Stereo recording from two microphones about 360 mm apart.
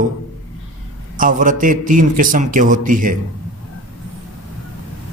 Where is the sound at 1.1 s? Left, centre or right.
Right.